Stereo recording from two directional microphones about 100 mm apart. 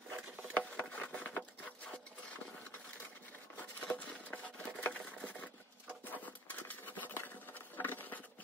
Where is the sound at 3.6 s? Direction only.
15° left (ahead or behind).